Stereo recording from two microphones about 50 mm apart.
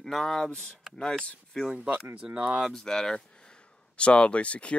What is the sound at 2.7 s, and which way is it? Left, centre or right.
Speech, centre.